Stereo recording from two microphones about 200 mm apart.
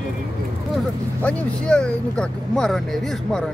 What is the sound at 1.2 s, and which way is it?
Speech, 5° left (ahead or behind).